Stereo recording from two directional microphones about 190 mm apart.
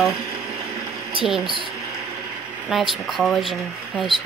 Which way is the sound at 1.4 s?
25° right (ahead or behind).